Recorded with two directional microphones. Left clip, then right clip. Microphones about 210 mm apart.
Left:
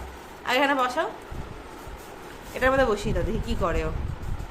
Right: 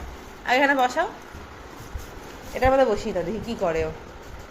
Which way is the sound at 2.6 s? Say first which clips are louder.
Right 3 dB; 5° left (ahead or behind).